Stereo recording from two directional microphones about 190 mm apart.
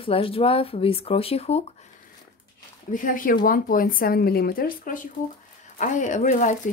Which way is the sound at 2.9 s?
45° left (ahead or behind).